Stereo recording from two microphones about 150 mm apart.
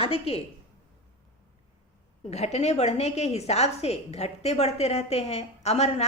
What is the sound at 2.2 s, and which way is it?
A woman's voice, 45° left (ahead or behind).